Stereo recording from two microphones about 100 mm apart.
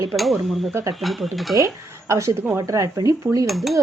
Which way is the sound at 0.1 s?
Centre (ahead or behind).